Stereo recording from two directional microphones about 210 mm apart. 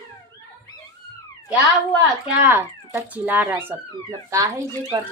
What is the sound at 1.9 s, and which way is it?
Speech, 5° right (ahead or behind).